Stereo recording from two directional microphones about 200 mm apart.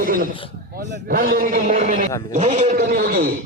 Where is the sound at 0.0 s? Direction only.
45° right (ahead or behind).